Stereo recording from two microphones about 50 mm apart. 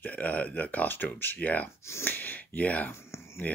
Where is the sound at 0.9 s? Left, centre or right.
Left.